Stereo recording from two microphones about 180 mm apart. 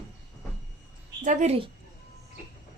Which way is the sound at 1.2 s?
40° right (ahead or behind).